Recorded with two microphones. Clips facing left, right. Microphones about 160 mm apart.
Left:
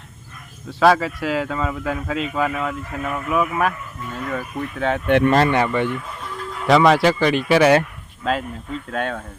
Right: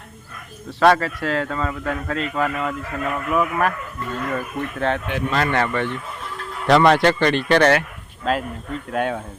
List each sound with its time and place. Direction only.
0.8 s speech: centre (ahead or behind)
5.0 s speech: 65° left (ahead or behind)
5.5 s speech: 15° left (ahead or behind)
6.7 s speech: centre (ahead or behind)